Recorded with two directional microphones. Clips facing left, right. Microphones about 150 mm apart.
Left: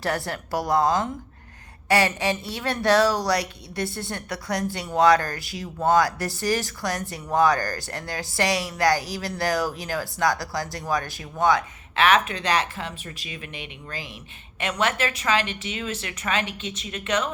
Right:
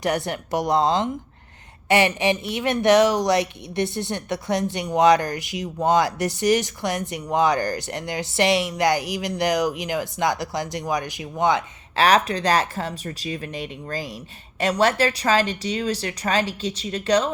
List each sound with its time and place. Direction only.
0.0 s speech: 20° right (ahead or behind)
11.9 s a woman's voice: 35° right (ahead or behind)